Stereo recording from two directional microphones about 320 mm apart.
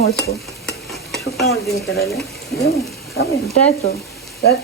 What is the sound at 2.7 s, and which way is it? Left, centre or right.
Hoot, left.